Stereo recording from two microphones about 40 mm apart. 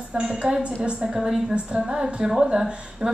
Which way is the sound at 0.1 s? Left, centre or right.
Right.